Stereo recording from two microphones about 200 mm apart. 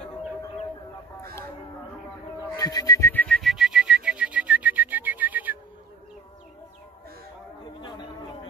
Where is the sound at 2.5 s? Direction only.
20° left (ahead or behind); by 5.6 s 10° right (ahead or behind).